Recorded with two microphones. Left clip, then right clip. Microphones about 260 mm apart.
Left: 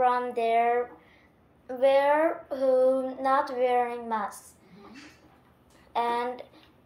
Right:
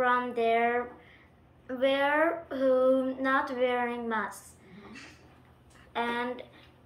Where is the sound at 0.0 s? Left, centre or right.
Left.